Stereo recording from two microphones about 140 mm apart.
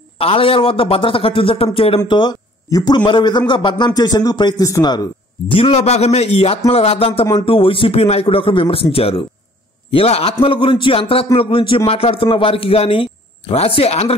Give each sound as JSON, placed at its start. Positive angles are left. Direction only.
{"t": 0.2, "sound": "a man's voice", "side_deg": 45}
{"t": 5.5, "sound": "a man's voice", "side_deg": 40}